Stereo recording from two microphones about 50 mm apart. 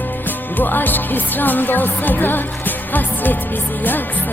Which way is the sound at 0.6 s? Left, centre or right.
Left.